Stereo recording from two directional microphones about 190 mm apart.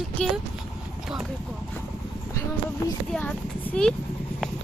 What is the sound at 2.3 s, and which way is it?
Speech, 15° left (ahead or behind).